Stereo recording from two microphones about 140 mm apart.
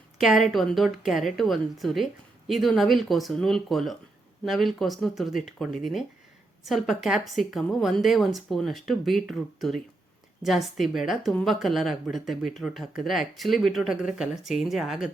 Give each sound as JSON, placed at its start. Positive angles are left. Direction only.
{"t": 0.2, "sound": "a woman's voice", "side_deg": 0}